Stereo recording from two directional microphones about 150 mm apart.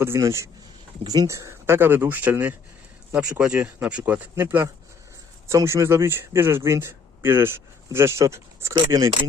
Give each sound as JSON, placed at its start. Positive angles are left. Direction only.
{"t": 0.0, "sound": "speech", "side_deg": -15}